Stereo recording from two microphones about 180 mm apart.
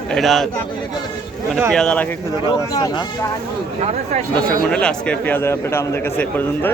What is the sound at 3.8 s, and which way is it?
Speech, 35° right (ahead or behind).